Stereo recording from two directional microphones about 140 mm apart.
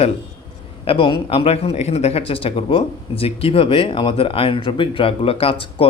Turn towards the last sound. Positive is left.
turn(degrees=40)  # may be behind; listen again after turning